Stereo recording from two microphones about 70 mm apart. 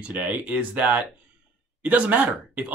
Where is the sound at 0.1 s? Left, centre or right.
Right.